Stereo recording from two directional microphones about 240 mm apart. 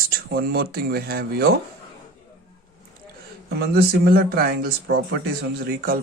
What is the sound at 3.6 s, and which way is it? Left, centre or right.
Speech, right.